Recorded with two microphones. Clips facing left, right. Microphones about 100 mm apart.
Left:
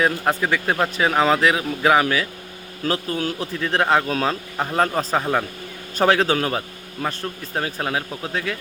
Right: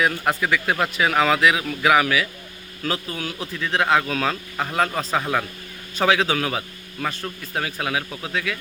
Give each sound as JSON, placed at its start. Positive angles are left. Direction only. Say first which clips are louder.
{"t": 0.0, "sound": "speech", "louder": "left 1 dB", "side_deg": 30}